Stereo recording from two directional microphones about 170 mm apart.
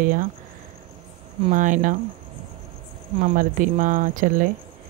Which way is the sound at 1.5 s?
50° right (ahead or behind).